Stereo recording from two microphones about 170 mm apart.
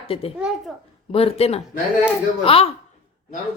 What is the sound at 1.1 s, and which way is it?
Speech, 35° left (ahead or behind).